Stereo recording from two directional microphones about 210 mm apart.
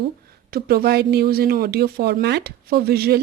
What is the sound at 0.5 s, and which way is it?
Speech, 50° right (ahead or behind).